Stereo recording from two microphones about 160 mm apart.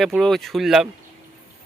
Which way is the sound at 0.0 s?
Centre (ahead or behind).